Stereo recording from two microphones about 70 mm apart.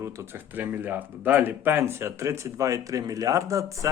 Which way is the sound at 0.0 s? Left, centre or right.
Right.